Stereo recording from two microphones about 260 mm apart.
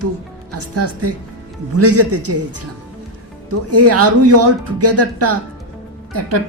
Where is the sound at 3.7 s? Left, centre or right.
Right.